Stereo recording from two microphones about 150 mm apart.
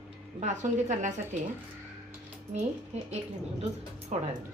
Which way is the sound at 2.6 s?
45° right (ahead or behind).